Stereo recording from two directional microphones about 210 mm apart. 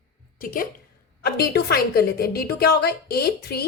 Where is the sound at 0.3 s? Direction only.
40° left (ahead or behind).